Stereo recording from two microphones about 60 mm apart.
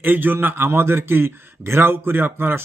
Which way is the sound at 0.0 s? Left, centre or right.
Right.